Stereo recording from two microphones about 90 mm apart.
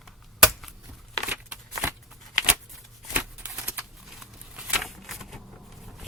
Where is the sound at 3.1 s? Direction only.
15° right (ahead or behind).